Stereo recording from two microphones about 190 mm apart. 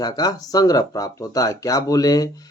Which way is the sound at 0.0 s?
20° left (ahead or behind).